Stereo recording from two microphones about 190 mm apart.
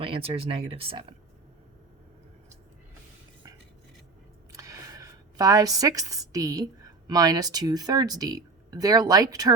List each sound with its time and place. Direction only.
0.0 s speech: 30° right (ahead or behind)
4.5 s a sound: 15° right (ahead or behind)
7.1 s speech: 20° right (ahead or behind)